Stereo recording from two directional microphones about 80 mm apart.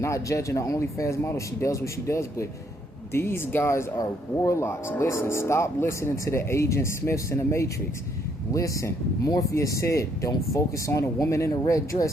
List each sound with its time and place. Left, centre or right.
0.0 s speech: left